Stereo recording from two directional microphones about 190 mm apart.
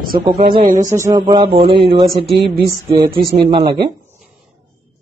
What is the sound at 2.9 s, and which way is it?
Speech, 20° right (ahead or behind).